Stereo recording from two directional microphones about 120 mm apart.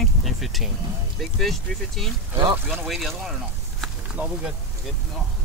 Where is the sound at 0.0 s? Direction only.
Centre (ahead or behind).